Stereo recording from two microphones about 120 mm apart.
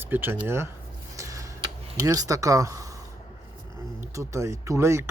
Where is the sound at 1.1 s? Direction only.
25° right (ahead or behind).